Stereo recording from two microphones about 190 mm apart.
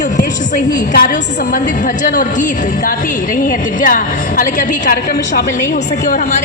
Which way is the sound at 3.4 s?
45° left (ahead or behind).